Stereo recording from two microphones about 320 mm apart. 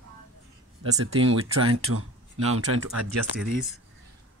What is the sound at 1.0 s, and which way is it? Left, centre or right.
Speech, right.